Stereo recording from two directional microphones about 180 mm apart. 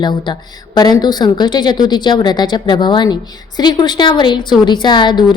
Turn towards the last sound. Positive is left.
turn(degrees=25)  # may be behind; listen again after turning